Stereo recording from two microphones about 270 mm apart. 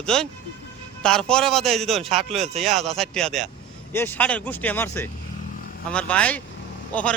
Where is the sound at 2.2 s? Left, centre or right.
Right.